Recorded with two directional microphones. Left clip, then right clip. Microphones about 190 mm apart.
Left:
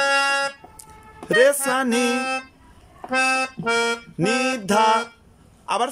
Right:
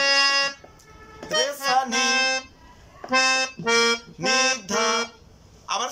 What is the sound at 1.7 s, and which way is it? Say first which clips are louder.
Music: even; 50° left (ahead or behind).